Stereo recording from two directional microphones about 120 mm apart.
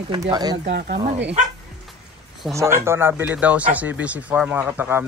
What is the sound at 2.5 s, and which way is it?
Speech, 20° right (ahead or behind).